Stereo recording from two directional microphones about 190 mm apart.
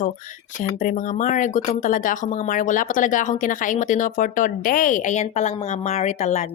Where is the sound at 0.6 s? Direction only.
45° left (ahead or behind).